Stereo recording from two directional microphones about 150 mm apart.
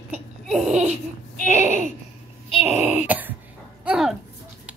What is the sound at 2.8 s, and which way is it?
Dog, 10° right (ahead or behind).